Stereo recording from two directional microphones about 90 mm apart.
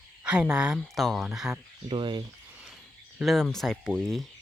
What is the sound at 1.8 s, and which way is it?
Speech, 60° right (ahead or behind).